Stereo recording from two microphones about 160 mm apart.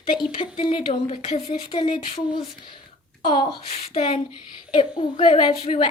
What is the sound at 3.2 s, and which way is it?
Speech, 30° left (ahead or behind).